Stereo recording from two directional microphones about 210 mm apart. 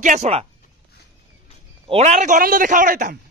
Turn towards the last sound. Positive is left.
turn(degrees=-40)  # may be behind; listen again after turning